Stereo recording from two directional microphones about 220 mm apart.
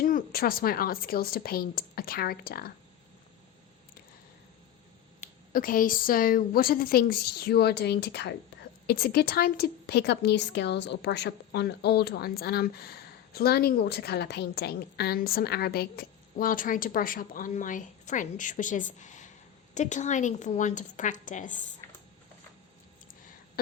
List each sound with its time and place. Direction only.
0.0 s a woman's voice: 40° left (ahead or behind)
5.2 s a woman's voice: 40° left (ahead or behind)